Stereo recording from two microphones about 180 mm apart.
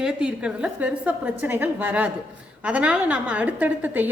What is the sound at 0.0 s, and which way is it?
A woman's voice, 5° right (ahead or behind).